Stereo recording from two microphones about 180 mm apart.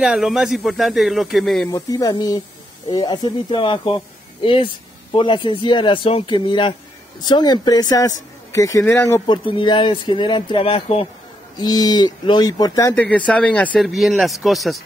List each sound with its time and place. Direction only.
0.0 s speech: 5° right (ahead or behind)
1.7 s speech: 20° left (ahead or behind)
9.2 s speech: 25° left (ahead or behind)
11.6 s speech: 20° left (ahead or behind); by 14.8 s centre (ahead or behind)